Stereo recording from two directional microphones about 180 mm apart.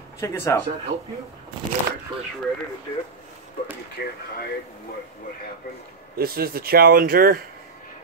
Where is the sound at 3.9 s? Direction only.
60° left (ahead or behind).